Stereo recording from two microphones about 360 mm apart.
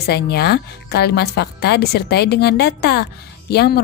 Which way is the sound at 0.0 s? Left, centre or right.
Left.